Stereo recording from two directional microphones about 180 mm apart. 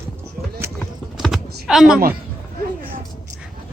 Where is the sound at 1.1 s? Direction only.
Centre (ahead or behind).